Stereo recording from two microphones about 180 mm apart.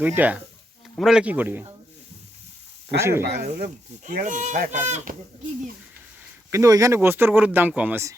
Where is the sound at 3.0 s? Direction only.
15° right (ahead or behind).